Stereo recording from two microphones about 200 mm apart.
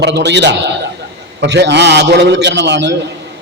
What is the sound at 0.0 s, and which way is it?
A man's voice, 60° right (ahead or behind).